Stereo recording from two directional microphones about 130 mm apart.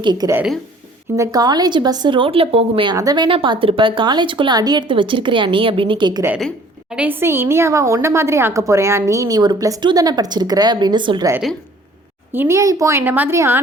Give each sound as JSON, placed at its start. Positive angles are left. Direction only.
{"t": 0.0, "sound": "speech", "side_deg": -35}
{"t": 2.9, "sound": "a woman's voice", "side_deg": -30}
{"t": 3.2, "sound": "speech", "side_deg": -40}
{"t": 6.9, "sound": "a woman's voice", "side_deg": -15}
{"t": 12.3, "sound": "a woman's voice", "side_deg": -20}